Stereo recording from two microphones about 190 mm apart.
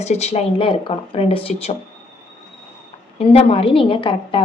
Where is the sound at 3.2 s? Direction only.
30° left (ahead or behind).